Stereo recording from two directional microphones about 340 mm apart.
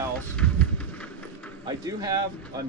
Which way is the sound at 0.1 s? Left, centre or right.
Centre.